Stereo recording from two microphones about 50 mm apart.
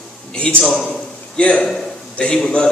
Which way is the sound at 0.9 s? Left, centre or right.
Left.